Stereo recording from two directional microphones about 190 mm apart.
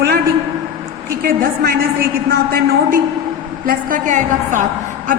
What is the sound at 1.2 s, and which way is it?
A man's voice, 50° right (ahead or behind).